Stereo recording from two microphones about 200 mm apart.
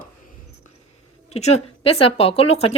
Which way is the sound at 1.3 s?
35° left (ahead or behind).